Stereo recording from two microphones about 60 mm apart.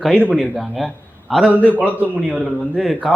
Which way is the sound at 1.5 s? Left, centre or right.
Right.